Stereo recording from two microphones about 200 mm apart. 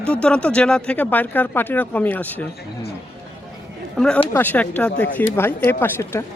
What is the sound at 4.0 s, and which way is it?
Speech, 5° left (ahead or behind).